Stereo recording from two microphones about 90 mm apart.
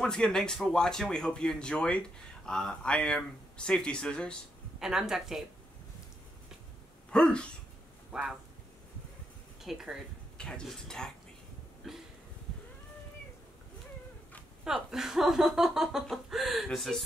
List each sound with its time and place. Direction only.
0.0 s speech: 5° left (ahead or behind)
4.7 s speech: 5° right (ahead or behind)
7.1 s speech: 10° left (ahead or behind)
8.1 s speech: 10° right (ahead or behind)
9.6 s speech: 5° right (ahead or behind)
10.3 s speech: 10° left (ahead or behind)
11.8 s a sound: centre (ahead or behind)
14.6 s speech: 5° right (ahead or behind)